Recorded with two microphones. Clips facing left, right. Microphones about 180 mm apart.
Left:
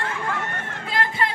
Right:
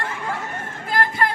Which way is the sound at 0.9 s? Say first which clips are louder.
Right 3 dB; 55° right (ahead or behind).